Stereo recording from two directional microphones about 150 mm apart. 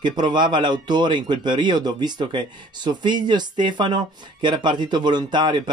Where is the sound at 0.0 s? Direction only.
30° right (ahead or behind).